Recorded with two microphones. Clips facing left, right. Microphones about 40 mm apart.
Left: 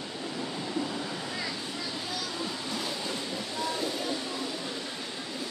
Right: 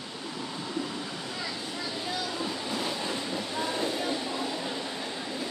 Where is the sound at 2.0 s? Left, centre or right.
Centre.